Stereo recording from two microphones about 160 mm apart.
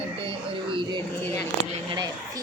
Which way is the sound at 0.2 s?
35° right (ahead or behind).